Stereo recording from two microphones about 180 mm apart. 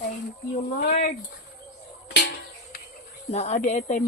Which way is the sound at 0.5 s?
50° left (ahead or behind).